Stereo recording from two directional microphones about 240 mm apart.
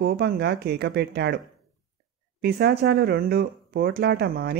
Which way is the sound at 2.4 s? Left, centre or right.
Right.